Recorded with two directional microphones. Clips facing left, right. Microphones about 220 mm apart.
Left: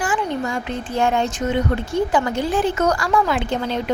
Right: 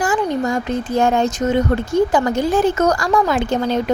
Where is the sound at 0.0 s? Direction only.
40° right (ahead or behind).